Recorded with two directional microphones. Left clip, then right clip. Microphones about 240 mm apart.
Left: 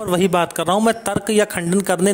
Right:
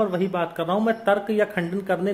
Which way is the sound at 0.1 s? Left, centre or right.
Left.